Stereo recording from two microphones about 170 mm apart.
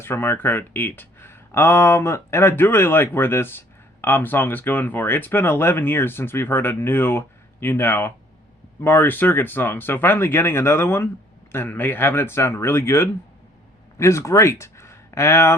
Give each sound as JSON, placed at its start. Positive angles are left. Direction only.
{"t": 0.0, "sound": "speech", "side_deg": 15}